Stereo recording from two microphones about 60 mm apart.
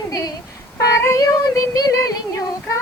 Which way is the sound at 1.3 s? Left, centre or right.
Left.